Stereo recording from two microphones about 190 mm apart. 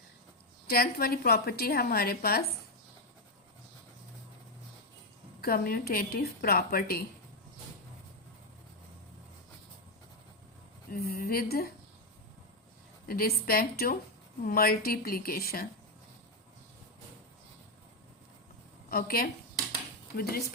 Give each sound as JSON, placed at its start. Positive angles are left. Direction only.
{"t": 0.7, "sound": "a woman's voice", "side_deg": 55}
{"t": 5.4, "sound": "a woman's voice", "side_deg": 50}
{"t": 10.9, "sound": "a woman's voice", "side_deg": 50}
{"t": 13.1, "sound": "a woman's voice", "side_deg": 50}
{"t": 18.9, "sound": "a woman's voice", "side_deg": 50}